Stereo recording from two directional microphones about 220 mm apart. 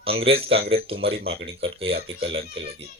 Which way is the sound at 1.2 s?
50° right (ahead or behind).